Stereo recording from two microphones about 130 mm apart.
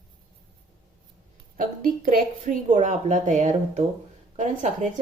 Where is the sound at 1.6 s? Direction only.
90° right; by 5.0 s 70° right (ahead or behind).